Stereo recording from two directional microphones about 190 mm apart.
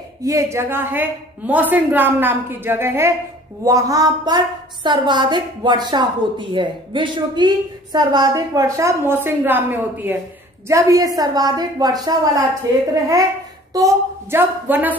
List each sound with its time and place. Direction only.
0.2 s a woman's voice: 15° right (ahead or behind)